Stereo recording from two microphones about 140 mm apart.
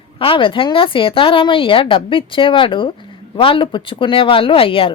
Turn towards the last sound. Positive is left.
turn(degrees=40)  # may be behind; listen again after turning